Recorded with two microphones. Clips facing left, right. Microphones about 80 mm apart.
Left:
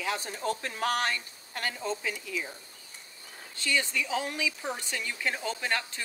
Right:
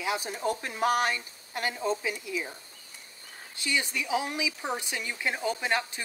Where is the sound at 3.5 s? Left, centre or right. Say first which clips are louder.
Left 1 dB; centre.